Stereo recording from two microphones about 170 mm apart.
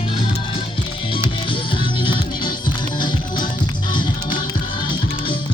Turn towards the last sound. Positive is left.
turn(degrees=30)  # may be behind; listen again after turning